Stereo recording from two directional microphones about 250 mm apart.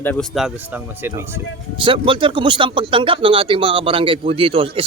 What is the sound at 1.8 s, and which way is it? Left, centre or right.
A man's voice, centre.